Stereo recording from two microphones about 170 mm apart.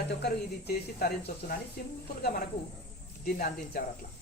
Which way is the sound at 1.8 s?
60° left (ahead or behind).